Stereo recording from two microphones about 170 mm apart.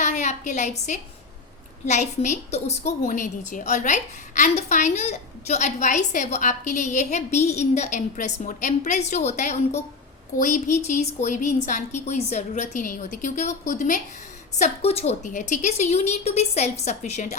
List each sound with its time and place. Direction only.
0.0 s a woman's voice: 45° left (ahead or behind)
14.5 s a woman's voice: 40° left (ahead or behind)